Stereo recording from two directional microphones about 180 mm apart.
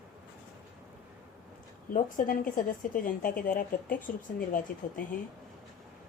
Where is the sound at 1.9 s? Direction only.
50° left (ahead or behind).